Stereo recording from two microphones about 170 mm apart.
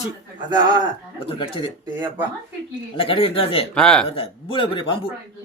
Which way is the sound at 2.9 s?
35° left (ahead or behind).